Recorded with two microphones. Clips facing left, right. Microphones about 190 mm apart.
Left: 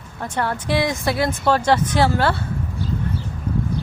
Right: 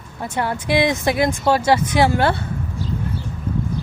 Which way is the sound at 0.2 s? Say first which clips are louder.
Right 1 dB; 10° right (ahead or behind).